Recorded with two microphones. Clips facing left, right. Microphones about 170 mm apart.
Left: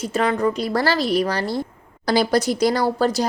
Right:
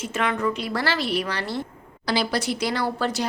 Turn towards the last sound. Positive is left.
turn(degrees=40)  # may be behind; listen again after turning